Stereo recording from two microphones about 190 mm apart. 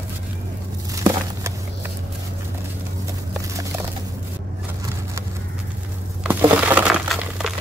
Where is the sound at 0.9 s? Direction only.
15° right (ahead or behind).